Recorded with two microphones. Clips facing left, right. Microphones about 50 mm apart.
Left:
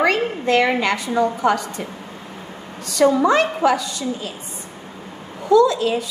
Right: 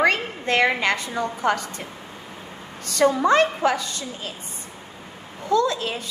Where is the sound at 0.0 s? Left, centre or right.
Right.